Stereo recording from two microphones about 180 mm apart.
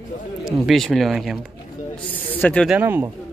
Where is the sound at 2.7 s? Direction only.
10° right (ahead or behind).